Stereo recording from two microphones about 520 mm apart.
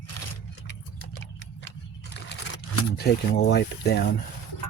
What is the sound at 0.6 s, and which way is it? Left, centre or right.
Vehicle, centre.